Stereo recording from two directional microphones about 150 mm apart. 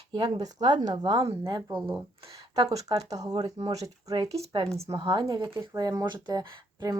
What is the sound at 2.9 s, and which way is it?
Speech, 25° right (ahead or behind).